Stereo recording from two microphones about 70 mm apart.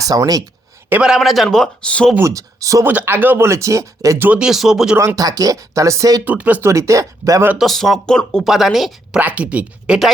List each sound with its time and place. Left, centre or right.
0.0 s speech: right
1.0 s a man's voice: centre
2.2 s speech: right
2.8 s speech: right
3.4 s speech: right
4.4 s speech: centre
4.9 s speech: right
6.2 s speech: right
6.6 s speech: right
7.6 s a man's voice: centre
8.4 s speech: centre
9.1 s speech: right